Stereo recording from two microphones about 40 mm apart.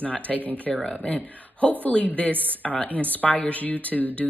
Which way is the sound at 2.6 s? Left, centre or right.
Left.